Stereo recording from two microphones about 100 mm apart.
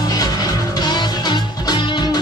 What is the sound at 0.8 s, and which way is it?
Music, 45° left (ahead or behind).